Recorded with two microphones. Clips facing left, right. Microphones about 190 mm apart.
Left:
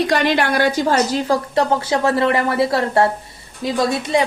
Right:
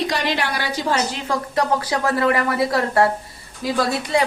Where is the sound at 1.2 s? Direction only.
30° left (ahead or behind).